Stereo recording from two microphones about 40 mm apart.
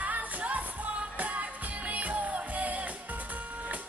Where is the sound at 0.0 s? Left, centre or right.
Right.